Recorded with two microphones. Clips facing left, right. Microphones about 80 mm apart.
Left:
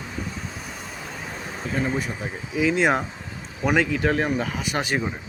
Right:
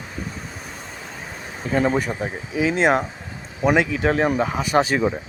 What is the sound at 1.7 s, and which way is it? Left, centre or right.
Speech, right.